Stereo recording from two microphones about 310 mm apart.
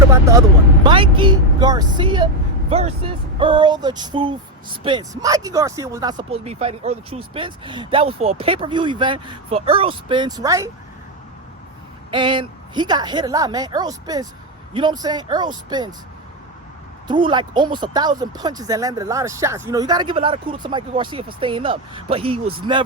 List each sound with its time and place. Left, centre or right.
0.1 s speech: centre
12.1 s speech: centre
17.1 s speech: centre